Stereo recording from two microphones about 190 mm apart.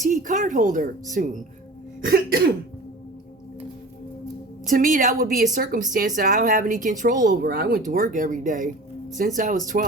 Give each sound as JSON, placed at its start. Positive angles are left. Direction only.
{"t": 0.1, "sound": "speech", "side_deg": -40}
{"t": 4.7, "sound": "speech", "side_deg": -45}
{"t": 7.9, "sound": "speech", "side_deg": -40}